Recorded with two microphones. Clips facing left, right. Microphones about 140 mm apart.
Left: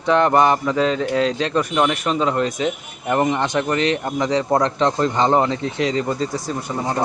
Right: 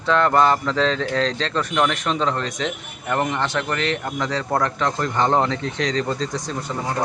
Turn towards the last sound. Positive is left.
turn(degrees=10)  # may be behind; listen again after turning